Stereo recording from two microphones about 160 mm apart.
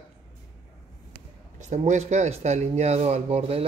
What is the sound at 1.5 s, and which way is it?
Speech, 45° right (ahead or behind).